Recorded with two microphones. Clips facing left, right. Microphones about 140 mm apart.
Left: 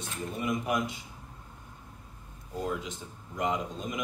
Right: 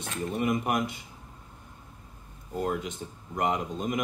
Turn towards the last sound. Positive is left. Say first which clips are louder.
# right 4 dB
turn(degrees=-55)  # may be behind; listen again after turning